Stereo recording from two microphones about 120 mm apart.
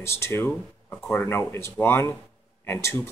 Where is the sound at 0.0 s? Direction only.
20° left (ahead or behind).